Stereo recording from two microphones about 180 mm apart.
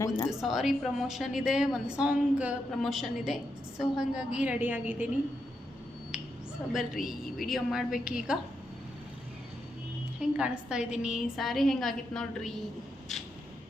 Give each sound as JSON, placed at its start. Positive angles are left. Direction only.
{"t": 0.0, "sound": "a woman's voice", "side_deg": 20}
{"t": 0.3, "sound": "a woman's voice", "side_deg": 0}
{"t": 6.6, "sound": "a woman's voice", "side_deg": 5}
{"t": 10.2, "sound": "a woman's voice", "side_deg": -5}